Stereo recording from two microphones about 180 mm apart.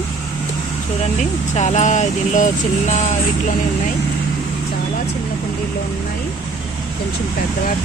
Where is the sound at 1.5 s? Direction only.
40° left (ahead or behind).